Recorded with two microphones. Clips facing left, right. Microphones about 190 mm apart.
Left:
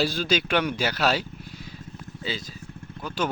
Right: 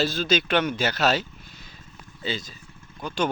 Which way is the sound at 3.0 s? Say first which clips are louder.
Right 2 dB; 5° left (ahead or behind).